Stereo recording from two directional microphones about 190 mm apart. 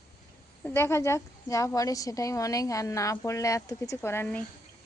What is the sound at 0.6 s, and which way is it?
A woman's voice, 10° left (ahead or behind).